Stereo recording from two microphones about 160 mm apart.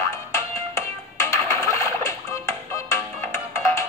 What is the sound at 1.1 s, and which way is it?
Music, 15° left (ahead or behind).